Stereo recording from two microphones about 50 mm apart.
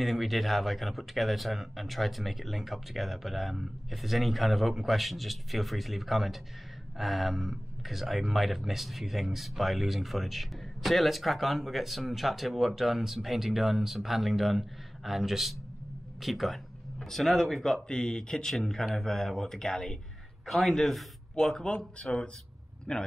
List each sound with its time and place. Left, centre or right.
0.0 s speech: centre
17.8 s speech: centre